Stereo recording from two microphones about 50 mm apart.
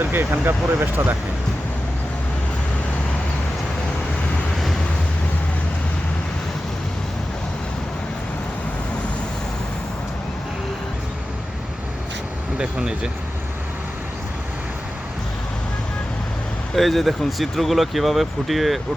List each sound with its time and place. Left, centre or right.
0.0 s speech: right
4.5 s vehicle: centre
12.5 s speech: centre
16.7 s speech: centre